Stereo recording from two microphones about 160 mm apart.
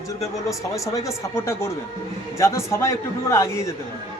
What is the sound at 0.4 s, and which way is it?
Speech, 20° left (ahead or behind).